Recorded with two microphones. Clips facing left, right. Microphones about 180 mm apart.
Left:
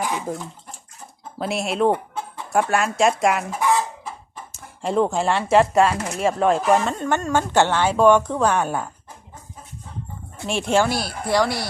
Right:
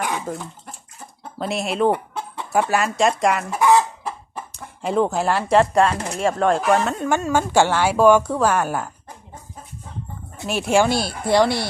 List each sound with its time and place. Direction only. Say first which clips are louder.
0.3 s speech: left 1 dB; 15° left (ahead or behind)
1.4 s a woman's voice: even; centre (ahead or behind)
3.5 s chicken: right 5 dB; 70° right (ahead or behind)
4.5 s a woman's voice: even; centre (ahead or behind)
10.4 s a woman's voice: right 1 dB; 5° right (ahead or behind)
10.8 s speech: right 3 dB; 25° right (ahead or behind)